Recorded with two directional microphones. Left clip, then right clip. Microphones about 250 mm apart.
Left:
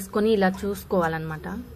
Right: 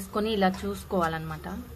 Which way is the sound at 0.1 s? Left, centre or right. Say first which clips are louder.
Left 5 dB; centre.